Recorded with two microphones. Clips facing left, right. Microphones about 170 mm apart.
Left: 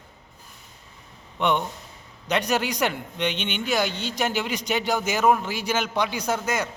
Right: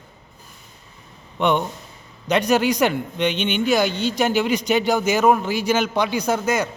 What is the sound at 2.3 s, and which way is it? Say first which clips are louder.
A man's voice: right 6 dB; 10° right (ahead or behind).